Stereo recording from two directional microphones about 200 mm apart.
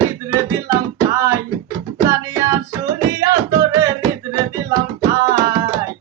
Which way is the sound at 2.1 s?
15° right (ahead or behind).